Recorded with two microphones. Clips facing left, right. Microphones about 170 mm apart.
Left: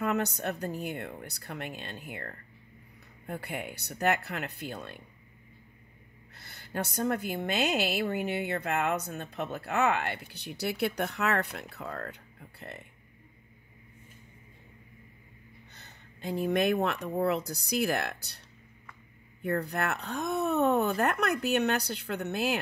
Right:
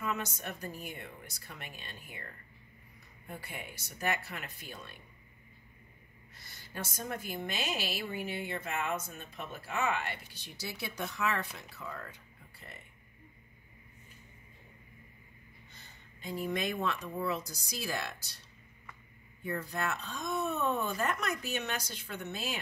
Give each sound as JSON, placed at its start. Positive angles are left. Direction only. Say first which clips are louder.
{"t": 0.0, "sound": "a woman's voice", "louder": "left 7 dB", "side_deg": 65}
{"t": 6.4, "sound": "a woman's voice", "louder": "left 8 dB", "side_deg": 60}
{"t": 15.7, "sound": "speech", "louder": "left 3 dB", "side_deg": 65}
{"t": 19.4, "sound": "a woman's voice", "louder": "left 5 dB", "side_deg": 65}